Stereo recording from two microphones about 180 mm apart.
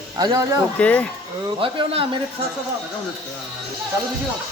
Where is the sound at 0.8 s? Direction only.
5° left (ahead or behind).